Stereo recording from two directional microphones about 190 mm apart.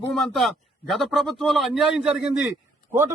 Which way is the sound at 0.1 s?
Centre (ahead or behind).